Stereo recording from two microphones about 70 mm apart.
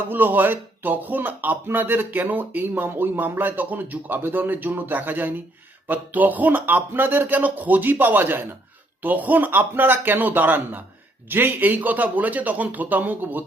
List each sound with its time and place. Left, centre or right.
0.1 s speech: right